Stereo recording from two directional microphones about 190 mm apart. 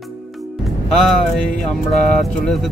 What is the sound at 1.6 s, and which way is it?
Speech, centre (ahead or behind).